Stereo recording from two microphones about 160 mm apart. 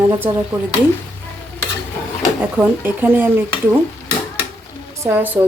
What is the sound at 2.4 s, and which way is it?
Speech, 10° right (ahead or behind).